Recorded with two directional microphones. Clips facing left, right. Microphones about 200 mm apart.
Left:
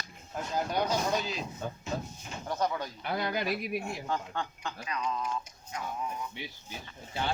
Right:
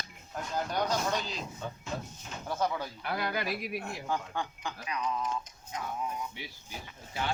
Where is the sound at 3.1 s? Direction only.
25° left (ahead or behind).